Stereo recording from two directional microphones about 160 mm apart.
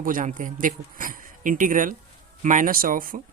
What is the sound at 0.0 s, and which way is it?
Speech, 60° right (ahead or behind).